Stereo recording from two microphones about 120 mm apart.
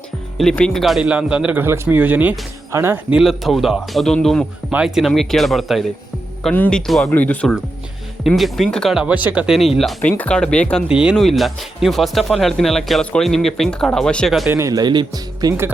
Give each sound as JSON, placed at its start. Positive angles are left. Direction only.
{"t": 0.3, "sound": "speech", "side_deg": 5}
{"t": 3.2, "sound": "speech", "side_deg": 0}
{"t": 6.5, "sound": "speech", "side_deg": 10}
{"t": 7.1, "sound": "speech", "side_deg": 15}
{"t": 8.4, "sound": "speech", "side_deg": 0}
{"t": 10.0, "sound": "speech", "side_deg": 10}
{"t": 10.8, "sound": "speech", "side_deg": -5}
{"t": 14.4, "sound": "speech", "side_deg": -25}